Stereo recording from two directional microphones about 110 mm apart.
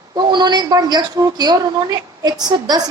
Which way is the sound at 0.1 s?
40° right (ahead or behind).